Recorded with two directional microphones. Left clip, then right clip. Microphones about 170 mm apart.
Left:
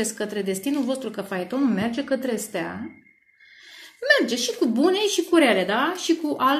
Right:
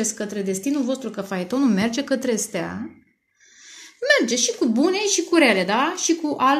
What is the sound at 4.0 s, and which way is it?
Speech, 40° right (ahead or behind).